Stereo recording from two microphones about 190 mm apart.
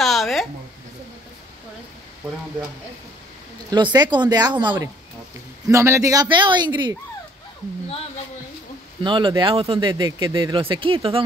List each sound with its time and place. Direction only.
0.0 s a sound: centre (ahead or behind)
3.7 s speech: 25° right (ahead or behind)
9.0 s speech: 25° right (ahead or behind)